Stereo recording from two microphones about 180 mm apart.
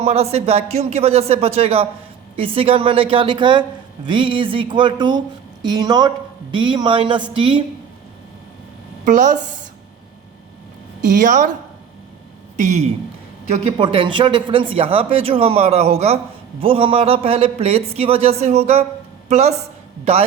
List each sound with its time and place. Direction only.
0.0 s a woman's voice: 35° right (ahead or behind)
9.0 s a woman's voice: 45° right (ahead or behind)
11.0 s a woman's voice: 45° right (ahead or behind)
12.5 s speech: 40° right (ahead or behind)
13.5 s speech: 30° right (ahead or behind)